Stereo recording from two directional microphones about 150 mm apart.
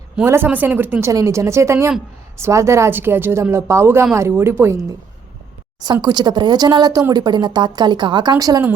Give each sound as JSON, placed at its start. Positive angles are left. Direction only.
{"t": 0.2, "sound": "speech", "side_deg": -10}
{"t": 5.8, "sound": "speech", "side_deg": -30}